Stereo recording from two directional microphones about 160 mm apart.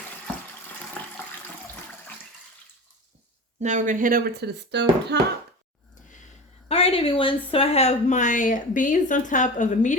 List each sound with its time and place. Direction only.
3.6 s speech: 50° right (ahead or behind); by 5.2 s 90° right
6.7 s speech: 40° left (ahead or behind)